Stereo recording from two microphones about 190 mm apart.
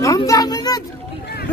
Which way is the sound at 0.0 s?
15° left (ahead or behind).